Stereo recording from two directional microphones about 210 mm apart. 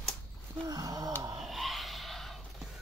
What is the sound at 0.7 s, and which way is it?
Gasp, 15° right (ahead or behind).